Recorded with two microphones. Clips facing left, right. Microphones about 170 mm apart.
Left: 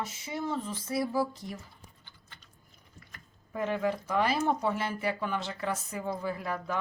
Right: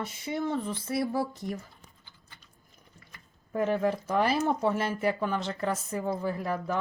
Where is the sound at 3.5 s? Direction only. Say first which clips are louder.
Right 3 dB; 45° right (ahead or behind).